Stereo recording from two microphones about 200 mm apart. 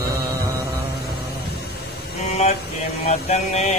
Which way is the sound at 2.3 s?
30° left (ahead or behind).